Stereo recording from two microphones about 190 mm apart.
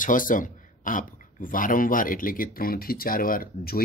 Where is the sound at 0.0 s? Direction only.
45° left (ahead or behind).